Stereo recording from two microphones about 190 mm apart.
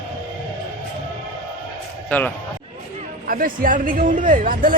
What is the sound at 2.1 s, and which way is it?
Speech, 10° left (ahead or behind).